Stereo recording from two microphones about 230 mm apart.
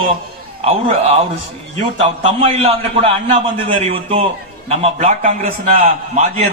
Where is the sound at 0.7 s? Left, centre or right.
Right.